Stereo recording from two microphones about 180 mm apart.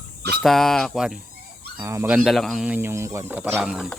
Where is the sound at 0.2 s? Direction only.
65° right (ahead or behind).